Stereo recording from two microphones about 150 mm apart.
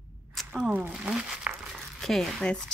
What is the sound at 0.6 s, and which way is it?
Speech, 10° right (ahead or behind).